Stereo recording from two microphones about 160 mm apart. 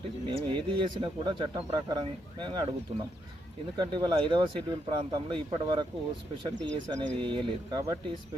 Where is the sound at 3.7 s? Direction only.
30° right (ahead or behind).